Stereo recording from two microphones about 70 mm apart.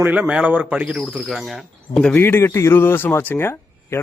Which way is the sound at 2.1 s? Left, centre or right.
Left.